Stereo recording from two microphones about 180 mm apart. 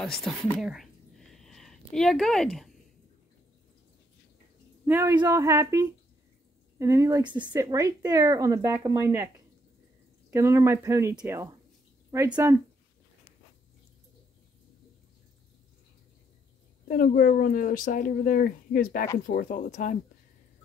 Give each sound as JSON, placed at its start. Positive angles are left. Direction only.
{"t": 0.0, "sound": "speech", "side_deg": 0}
{"t": 0.6, "sound": "a sound", "side_deg": 0}
{"t": 4.8, "sound": "a man's voice", "side_deg": -10}
{"t": 10.3, "sound": "speech", "side_deg": -15}
{"t": 16.8, "sound": "speech", "side_deg": 50}